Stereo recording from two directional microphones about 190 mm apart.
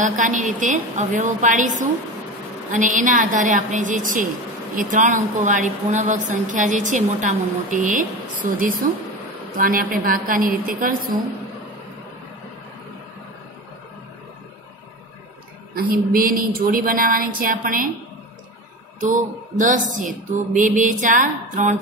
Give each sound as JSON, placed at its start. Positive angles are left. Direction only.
{"t": 0.1, "sound": "a woman's voice", "side_deg": -40}
{"t": 15.7, "sound": "speech", "side_deg": -50}
{"t": 18.9, "sound": "speech", "side_deg": -40}